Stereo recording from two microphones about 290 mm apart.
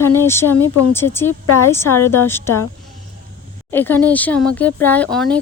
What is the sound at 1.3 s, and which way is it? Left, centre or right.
Speech, left.